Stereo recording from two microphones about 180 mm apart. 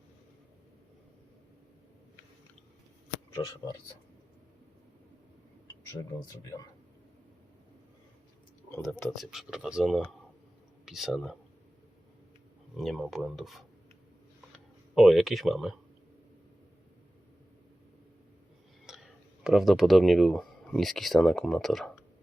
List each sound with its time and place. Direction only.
3.3 s speech: 20° left (ahead or behind)
6.0 s speech: 20° left (ahead or behind)
8.8 s speech: 5° left (ahead or behind)
12.7 s speech: centre (ahead or behind)
18.9 s a sound: 5° right (ahead or behind)
19.5 s speech: centre (ahead or behind)